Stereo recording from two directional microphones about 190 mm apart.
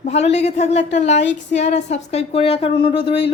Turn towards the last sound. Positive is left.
turn(degrees=30)  # may be behind; listen again after turning